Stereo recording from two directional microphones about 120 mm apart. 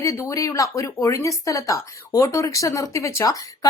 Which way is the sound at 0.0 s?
25° left (ahead or behind).